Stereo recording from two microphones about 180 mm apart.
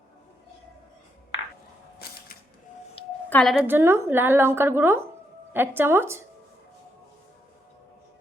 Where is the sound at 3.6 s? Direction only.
15° right (ahead or behind).